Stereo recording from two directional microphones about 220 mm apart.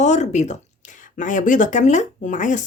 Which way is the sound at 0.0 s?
30° left (ahead or behind).